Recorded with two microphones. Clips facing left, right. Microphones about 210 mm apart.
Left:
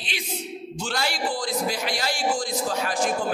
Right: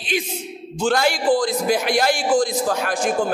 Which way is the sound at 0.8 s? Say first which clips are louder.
Right 9 dB; 50° right (ahead or behind).